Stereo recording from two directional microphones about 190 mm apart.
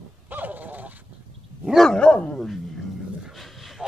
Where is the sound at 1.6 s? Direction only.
Centre (ahead or behind).